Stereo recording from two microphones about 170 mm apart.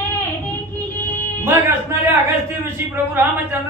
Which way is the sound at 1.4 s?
10° right (ahead or behind).